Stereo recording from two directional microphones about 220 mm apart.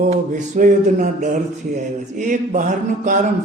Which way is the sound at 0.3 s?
35° right (ahead or behind).